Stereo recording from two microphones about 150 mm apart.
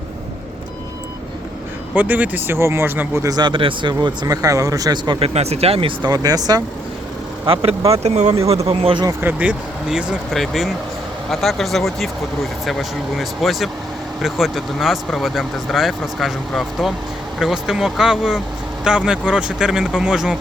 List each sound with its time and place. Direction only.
2.0 s speech: 10° right (ahead or behind)
3.3 s speech: 35° right (ahead or behind)
5.2 s speech: 45° right (ahead or behind); by 6.6 s 25° right (ahead or behind)
7.4 s speech: 40° right (ahead or behind)
9.2 s speech: 10° right (ahead or behind)
13.1 s speech: centre (ahead or behind)